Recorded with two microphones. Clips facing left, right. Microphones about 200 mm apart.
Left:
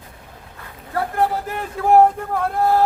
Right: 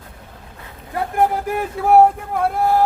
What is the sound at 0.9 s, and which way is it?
Vehicle, 15° right (ahead or behind).